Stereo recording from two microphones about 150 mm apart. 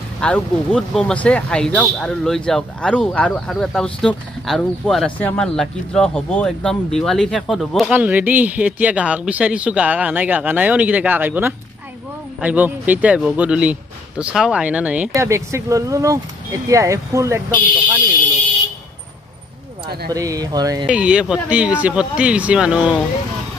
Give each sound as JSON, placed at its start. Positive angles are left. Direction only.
{"t": 0.2, "sound": "speech", "side_deg": 5}
{"t": 7.9, "sound": "speech", "side_deg": -10}
{"t": 15.1, "sound": "speech", "side_deg": -20}
{"t": 20.1, "sound": "speech", "side_deg": -25}
{"t": 20.8, "sound": "speech", "side_deg": -5}